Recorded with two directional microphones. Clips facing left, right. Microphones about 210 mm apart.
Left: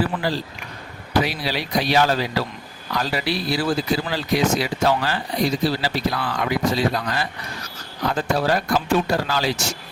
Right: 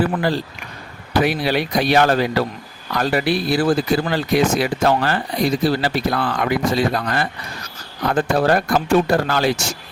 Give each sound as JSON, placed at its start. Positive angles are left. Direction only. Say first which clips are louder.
{"t": 0.0, "sound": "speech", "louder": "right 4 dB", "side_deg": -55}